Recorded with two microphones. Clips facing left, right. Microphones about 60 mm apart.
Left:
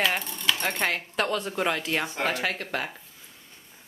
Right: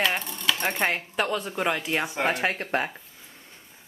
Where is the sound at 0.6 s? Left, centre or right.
Centre.